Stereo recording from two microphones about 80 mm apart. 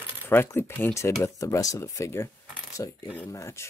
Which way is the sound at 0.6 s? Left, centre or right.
Left.